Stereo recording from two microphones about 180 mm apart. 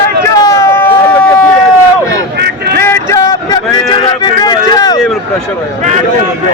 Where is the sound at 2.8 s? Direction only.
15° left (ahead or behind).